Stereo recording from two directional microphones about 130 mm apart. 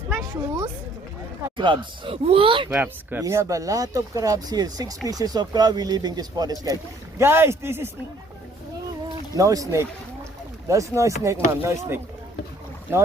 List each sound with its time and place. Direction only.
0.1 s a sound: 20° right (ahead or behind)
1.5 s speech: 40° right (ahead or behind)
2.7 s speech: 15° right (ahead or behind); by 6.5 s 30° right (ahead or behind)
7.2 s speech: 20° right (ahead or behind)
9.4 s speech: 25° right (ahead or behind)